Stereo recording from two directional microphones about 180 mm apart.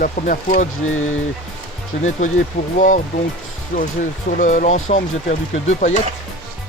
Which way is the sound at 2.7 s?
45° left (ahead or behind).